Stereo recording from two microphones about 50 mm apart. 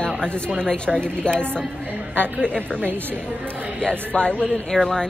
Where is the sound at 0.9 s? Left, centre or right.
Right.